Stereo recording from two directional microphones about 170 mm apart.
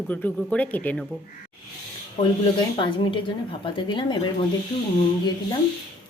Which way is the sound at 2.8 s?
30° left (ahead or behind).